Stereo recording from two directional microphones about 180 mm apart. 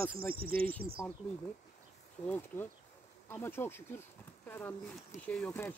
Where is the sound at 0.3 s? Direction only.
55° right (ahead or behind).